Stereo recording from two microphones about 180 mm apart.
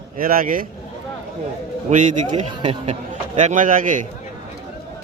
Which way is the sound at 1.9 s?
45° right (ahead or behind).